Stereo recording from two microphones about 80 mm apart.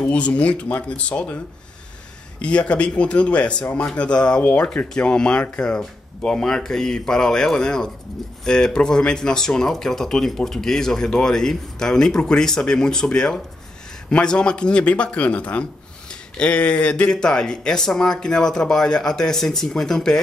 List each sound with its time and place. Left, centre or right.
0.0 s a man's voice: centre
2.4 s a man's voice: centre